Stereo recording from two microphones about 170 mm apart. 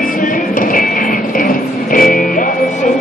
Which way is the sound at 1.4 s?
55° left (ahead or behind).